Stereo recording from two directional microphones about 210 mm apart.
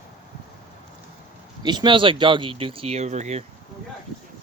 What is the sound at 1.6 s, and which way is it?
Speech, 20° right (ahead or behind).